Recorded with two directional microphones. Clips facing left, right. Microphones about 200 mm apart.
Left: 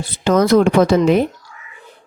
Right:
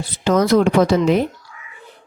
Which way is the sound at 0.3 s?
55° left (ahead or behind).